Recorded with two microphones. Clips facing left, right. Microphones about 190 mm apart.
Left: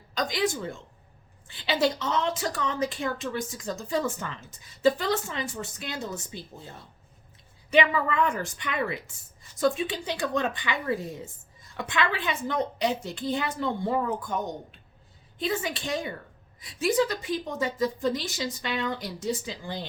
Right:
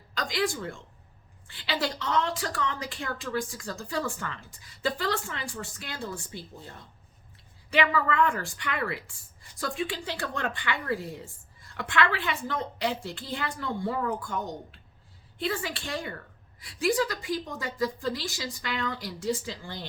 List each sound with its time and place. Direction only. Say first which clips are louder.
0.1 s speech: left 2 dB; 20° left (ahead or behind)
7.7 s speech: left 2 dB; 20° left (ahead or behind)